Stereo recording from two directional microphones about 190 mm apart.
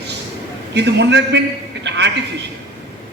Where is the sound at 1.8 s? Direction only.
65° right (ahead or behind).